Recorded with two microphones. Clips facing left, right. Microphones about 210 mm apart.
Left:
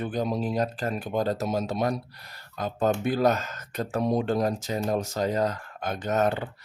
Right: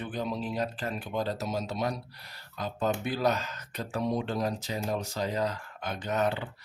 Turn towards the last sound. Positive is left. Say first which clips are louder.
# left 4 dB
turn(degrees=45)  # may be behind; listen again after turning